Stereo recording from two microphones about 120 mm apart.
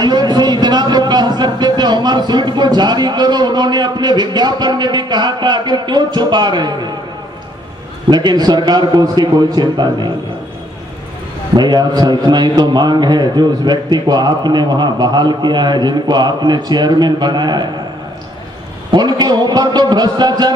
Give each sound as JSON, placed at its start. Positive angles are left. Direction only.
{"t": 0.0, "sound": "a man's voice", "side_deg": -35}
{"t": 8.1, "sound": "a man's voice", "side_deg": -35}
{"t": 11.5, "sound": "a man's voice", "side_deg": -35}
{"t": 18.9, "sound": "a man's voice", "side_deg": -35}